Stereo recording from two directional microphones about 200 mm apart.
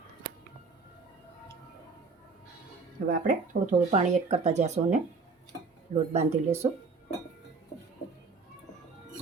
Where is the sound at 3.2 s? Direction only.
40° right (ahead or behind).